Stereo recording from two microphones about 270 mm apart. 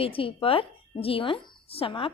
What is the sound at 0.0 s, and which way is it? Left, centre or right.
A woman's voice, centre.